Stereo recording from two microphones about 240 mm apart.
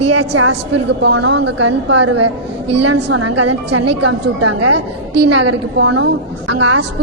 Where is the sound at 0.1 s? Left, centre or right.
Right.